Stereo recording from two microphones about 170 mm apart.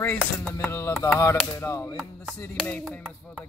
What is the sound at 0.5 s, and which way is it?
Speech, 15° left (ahead or behind).